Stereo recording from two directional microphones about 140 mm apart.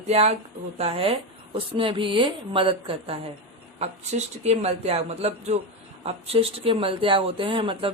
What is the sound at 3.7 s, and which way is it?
Speech, 50° right (ahead or behind).